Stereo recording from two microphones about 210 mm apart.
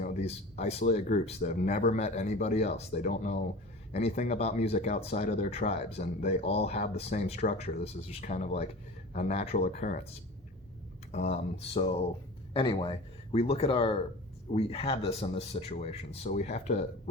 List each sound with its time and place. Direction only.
0.0 s speech: 35° left (ahead or behind)
11.1 s speech: 30° left (ahead or behind)